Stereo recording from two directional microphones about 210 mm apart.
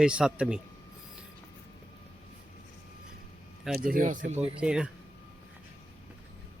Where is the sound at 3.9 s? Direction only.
40° right (ahead or behind).